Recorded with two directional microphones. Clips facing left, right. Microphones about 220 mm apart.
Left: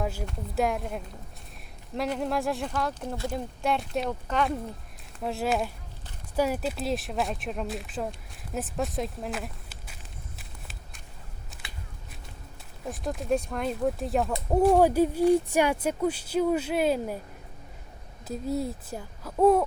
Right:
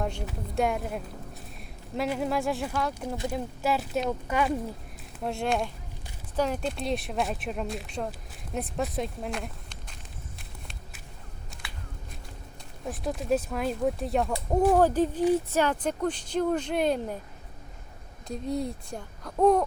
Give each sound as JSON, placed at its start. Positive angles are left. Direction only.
{"t": 0.0, "sound": "speech", "side_deg": 5}
{"t": 8.5, "sound": "walk", "side_deg": 0}
{"t": 12.8, "sound": "speech", "side_deg": 0}
{"t": 14.8, "sound": "speech", "side_deg": 10}
{"t": 18.3, "sound": "speech", "side_deg": 5}